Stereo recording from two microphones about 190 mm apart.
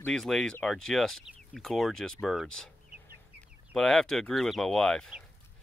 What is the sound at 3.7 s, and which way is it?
Speech, centre (ahead or behind).